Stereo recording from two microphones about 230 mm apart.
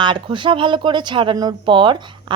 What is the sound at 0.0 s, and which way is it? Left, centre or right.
Speech, right.